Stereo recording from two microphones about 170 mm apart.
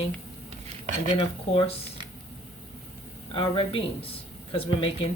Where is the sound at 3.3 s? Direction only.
30° left (ahead or behind).